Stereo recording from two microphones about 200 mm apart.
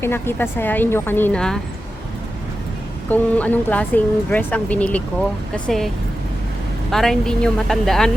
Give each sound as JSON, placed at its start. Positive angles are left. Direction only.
{"t": 0.0, "sound": "speech", "side_deg": 10}
{"t": 3.1, "sound": "speech", "side_deg": 10}
{"t": 6.9, "sound": "speech", "side_deg": 0}